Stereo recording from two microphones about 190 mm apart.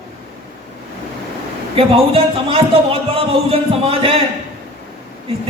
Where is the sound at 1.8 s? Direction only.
30° right (ahead or behind).